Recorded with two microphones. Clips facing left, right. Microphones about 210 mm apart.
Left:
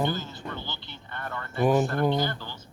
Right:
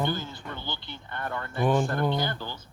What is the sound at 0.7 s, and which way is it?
Speech, 50° right (ahead or behind).